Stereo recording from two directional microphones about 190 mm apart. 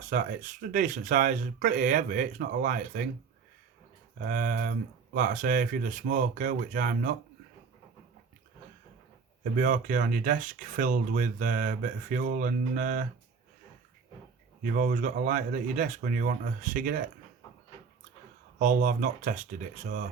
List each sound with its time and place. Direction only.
0.0 s speech: 45° right (ahead or behind)
4.2 s speech: 45° right (ahead or behind)
9.4 s speech: 45° right (ahead or behind)
14.6 s speech: 45° right (ahead or behind)
18.6 s speech: 40° right (ahead or behind)